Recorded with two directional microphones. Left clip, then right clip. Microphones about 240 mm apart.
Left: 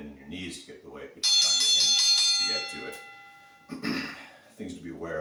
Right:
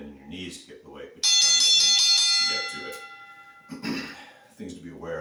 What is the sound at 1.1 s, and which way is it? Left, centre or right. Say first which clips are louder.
Bell: right 3 dB; right.